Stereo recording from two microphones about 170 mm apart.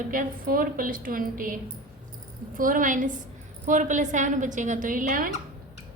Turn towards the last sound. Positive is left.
turn(degrees=-55)  # may be behind; listen again after turning